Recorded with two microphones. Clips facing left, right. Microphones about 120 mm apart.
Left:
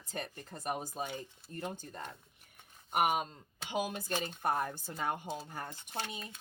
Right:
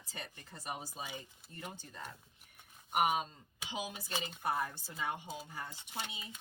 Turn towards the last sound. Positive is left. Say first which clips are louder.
# left 4 dB
turn(degrees=50)  # may be behind; listen again after turning